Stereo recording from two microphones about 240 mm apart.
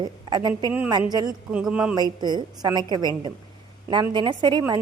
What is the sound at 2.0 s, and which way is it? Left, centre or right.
A woman's voice, centre.